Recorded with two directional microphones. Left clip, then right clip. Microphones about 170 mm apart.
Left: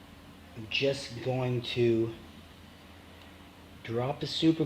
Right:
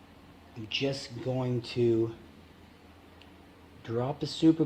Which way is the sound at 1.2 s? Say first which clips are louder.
Left 1 dB; 40° right (ahead or behind).